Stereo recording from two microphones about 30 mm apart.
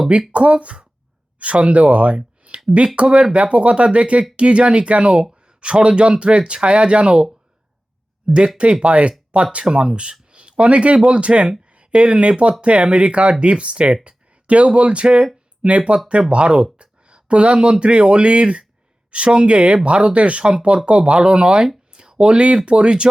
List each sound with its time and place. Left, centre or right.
0.3 s speech: right
8.8 s speech: right
9.6 s speech: right
14.0 s a sound: right
14.7 s speech: right